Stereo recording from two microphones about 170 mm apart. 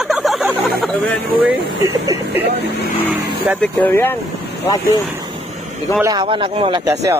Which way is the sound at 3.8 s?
10° left (ahead or behind).